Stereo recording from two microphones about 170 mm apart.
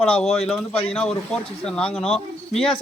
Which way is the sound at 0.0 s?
5° left (ahead or behind).